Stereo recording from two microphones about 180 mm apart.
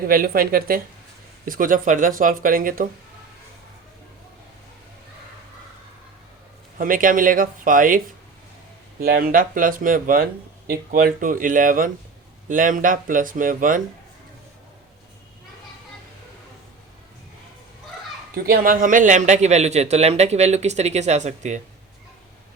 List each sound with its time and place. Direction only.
0.1 s speech: 55° right (ahead or behind)
6.7 s speech: 50° right (ahead or behind)
9.0 s speech: 60° right (ahead or behind)
18.4 s a man's voice: 55° right (ahead or behind)